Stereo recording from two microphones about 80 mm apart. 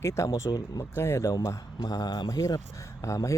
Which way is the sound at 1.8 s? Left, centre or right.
Left.